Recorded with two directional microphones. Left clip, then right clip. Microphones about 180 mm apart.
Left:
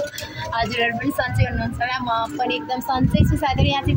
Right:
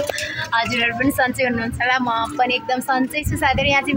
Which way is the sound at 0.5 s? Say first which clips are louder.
Right 1 dB; 10° right (ahead or behind).